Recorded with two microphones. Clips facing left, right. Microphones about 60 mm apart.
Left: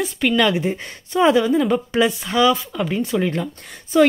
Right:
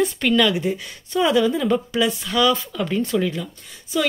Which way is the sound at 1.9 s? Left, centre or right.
Left.